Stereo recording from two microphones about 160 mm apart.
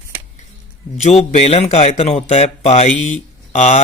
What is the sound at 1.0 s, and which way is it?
Speech, 40° left (ahead or behind).